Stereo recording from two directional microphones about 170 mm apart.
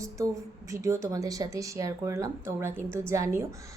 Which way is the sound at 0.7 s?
20° right (ahead or behind).